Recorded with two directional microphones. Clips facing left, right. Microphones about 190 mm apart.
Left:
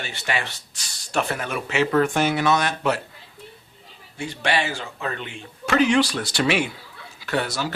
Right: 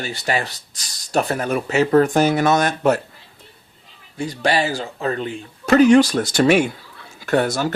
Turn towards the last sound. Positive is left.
turn(degrees=-50)  # may be behind; listen again after turning